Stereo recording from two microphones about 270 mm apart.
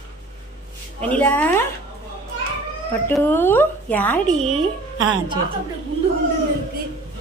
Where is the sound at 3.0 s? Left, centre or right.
Centre.